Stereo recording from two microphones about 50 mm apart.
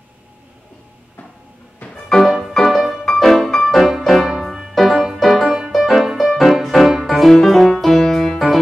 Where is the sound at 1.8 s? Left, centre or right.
Left.